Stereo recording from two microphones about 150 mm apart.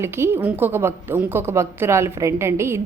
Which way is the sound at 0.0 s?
15° right (ahead or behind).